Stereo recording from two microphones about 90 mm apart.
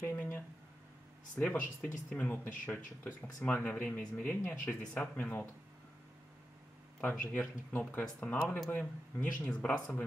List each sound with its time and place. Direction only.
0.0 s speech: 20° left (ahead or behind)
7.0 s speech: 20° left (ahead or behind)